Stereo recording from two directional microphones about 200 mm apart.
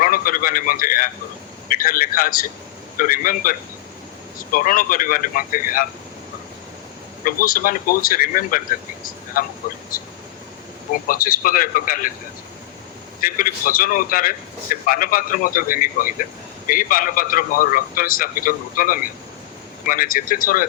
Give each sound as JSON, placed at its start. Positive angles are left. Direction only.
{"t": 0.0, "sound": "a man's voice", "side_deg": 45}
{"t": 7.3, "sound": "a man's voice", "side_deg": 45}
{"t": 9.0, "sound": "a sound", "side_deg": 45}
{"t": 9.9, "sound": "speech", "side_deg": 45}
{"t": 11.1, "sound": "a man's voice", "side_deg": 45}
{"t": 13.2, "sound": "a man's voice", "side_deg": 45}